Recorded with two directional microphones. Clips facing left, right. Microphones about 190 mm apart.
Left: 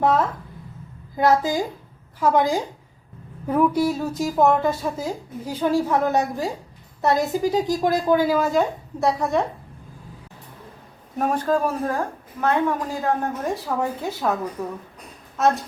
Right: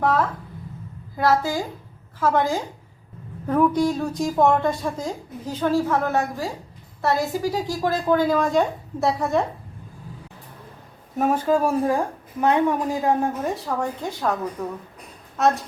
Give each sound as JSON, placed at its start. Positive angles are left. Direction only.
{"t": 0.0, "sound": "a woman's voice", "side_deg": 20}
{"t": 11.2, "sound": "a woman's voice", "side_deg": -5}
{"t": 13.4, "sound": "speech", "side_deg": 0}